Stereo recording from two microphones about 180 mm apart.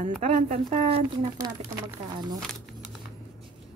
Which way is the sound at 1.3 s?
20° right (ahead or behind).